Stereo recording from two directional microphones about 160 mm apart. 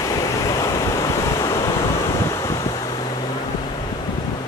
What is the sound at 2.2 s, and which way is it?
Wind, 20° left (ahead or behind).